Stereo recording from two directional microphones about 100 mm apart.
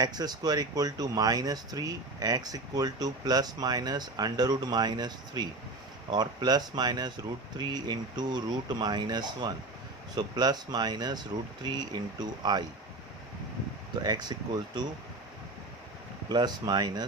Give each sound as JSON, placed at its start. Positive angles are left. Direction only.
{"t": 0.0, "sound": "speech", "side_deg": -40}
{"t": 14.0, "sound": "speech", "side_deg": -45}
{"t": 16.3, "sound": "speech", "side_deg": -45}